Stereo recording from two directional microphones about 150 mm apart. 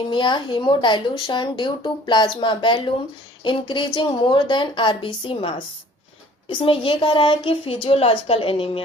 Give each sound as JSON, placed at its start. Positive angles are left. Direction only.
{"t": 0.1, "sound": "speech", "side_deg": 30}